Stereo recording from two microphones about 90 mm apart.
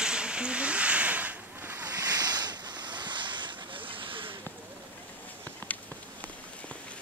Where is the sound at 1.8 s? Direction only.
45° right (ahead or behind).